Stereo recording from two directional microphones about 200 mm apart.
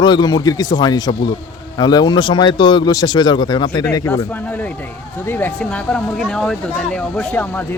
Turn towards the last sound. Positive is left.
turn(degrees=5)  # may be behind; listen again after turning